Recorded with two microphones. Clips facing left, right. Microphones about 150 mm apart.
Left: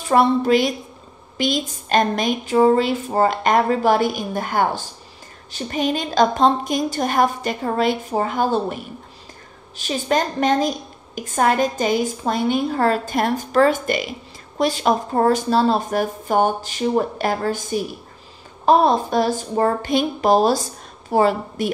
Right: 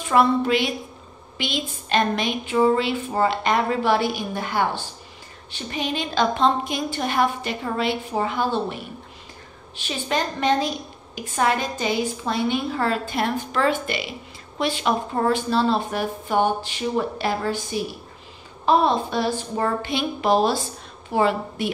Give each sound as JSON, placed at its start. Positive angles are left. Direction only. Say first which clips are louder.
{"t": 0.0, "sound": "a woman's voice", "louder": "left 2 dB", "side_deg": 40}
{"t": 9.8, "sound": "a woman's voice", "louder": "left 5 dB", "side_deg": 45}